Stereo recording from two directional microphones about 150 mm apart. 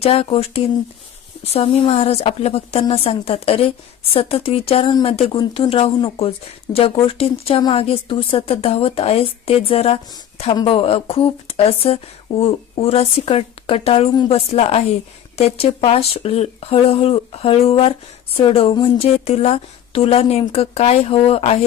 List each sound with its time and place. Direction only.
0.0 s speech: 40° left (ahead or behind)